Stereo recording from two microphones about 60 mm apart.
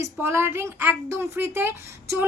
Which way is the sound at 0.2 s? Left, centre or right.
Right.